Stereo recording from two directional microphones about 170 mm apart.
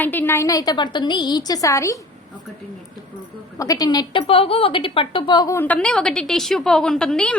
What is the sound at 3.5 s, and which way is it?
Speech, 20° left (ahead or behind).